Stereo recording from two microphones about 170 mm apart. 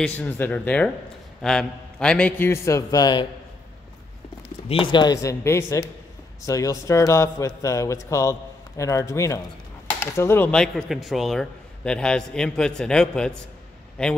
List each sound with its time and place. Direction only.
0.0 s a man's voice: 10° left (ahead or behind); by 3.3 s 25° left (ahead or behind)
4.6 s a man's voice: 30° left (ahead or behind); by 14.1 s 5° left (ahead or behind)